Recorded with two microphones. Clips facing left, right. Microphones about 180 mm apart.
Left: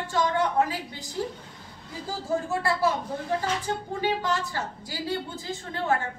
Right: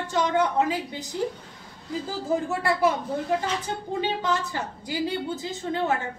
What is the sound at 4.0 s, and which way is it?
Female singing, 20° right (ahead or behind).